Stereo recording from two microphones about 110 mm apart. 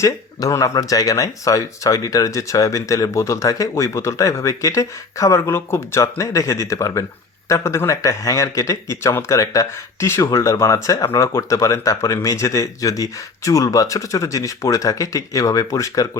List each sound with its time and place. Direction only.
0.0 s speech: 30° left (ahead or behind)